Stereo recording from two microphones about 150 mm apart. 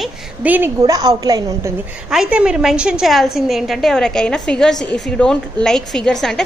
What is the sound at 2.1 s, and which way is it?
A woman's voice, 5° right (ahead or behind).